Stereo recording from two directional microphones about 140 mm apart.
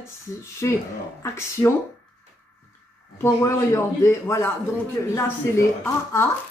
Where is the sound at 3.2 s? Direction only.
20° left (ahead or behind).